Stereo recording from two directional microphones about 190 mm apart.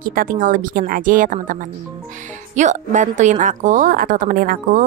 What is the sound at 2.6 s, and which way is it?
Speech, 40° right (ahead or behind).